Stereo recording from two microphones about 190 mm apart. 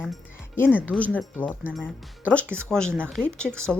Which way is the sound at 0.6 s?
10° left (ahead or behind).